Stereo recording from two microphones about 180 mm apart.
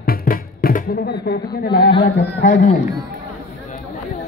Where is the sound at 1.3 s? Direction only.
65° left (ahead or behind).